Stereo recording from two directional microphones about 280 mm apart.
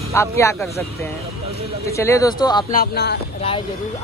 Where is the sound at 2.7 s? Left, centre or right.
Left.